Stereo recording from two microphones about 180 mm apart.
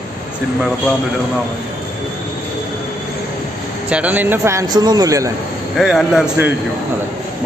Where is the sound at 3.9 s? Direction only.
10° right (ahead or behind).